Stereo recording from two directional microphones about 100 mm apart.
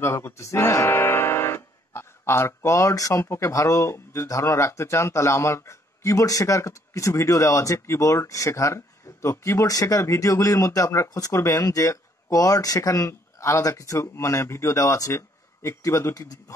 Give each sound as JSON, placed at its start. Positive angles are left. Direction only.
{"t": 0.0, "sound": "speech", "side_deg": 25}